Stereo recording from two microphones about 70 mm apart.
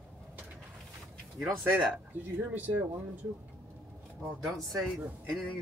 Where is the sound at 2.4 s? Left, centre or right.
Right.